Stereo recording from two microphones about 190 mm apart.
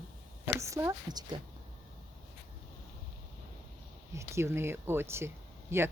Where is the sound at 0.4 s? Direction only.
15° right (ahead or behind).